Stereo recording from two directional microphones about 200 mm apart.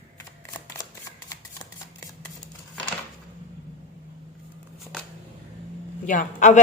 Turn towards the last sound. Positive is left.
turn(degrees=40)  # may be behind; listen again after turning